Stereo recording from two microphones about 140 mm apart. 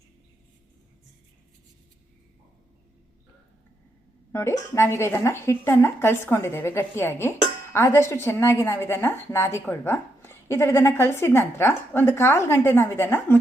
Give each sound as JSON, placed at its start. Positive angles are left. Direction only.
{"t": 4.3, "sound": "a woman's voice", "side_deg": 20}